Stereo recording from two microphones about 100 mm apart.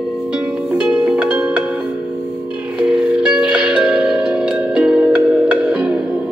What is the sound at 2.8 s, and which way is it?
Music, 10° right (ahead or behind).